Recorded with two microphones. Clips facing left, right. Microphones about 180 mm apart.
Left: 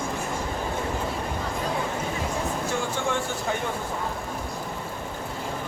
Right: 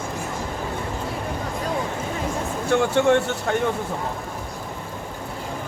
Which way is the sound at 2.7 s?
70° right (ahead or behind).